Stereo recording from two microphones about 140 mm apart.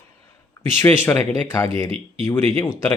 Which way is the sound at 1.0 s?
25° left (ahead or behind).